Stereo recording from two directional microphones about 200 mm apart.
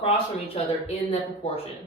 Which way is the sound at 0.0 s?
30° left (ahead or behind).